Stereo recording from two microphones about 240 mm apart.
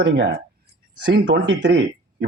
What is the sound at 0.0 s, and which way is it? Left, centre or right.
A man's voice, right.